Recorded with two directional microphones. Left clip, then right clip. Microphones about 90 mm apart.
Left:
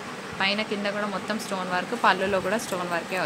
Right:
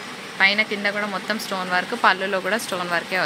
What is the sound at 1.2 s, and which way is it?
Speech, 15° right (ahead or behind).